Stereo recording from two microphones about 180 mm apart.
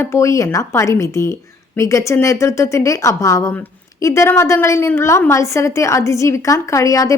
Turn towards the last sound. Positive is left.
turn(degrees=20)  # may be behind; listen again after turning